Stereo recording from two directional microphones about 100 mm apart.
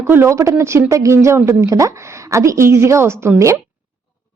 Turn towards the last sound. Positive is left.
turn(degrees=-30)  # may be behind; listen again after turning